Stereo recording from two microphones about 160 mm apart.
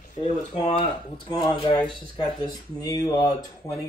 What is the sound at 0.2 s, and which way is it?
Speech, 40° left (ahead or behind).